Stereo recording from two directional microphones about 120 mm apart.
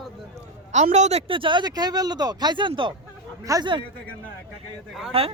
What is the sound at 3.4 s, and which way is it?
Speech, 30° right (ahead or behind).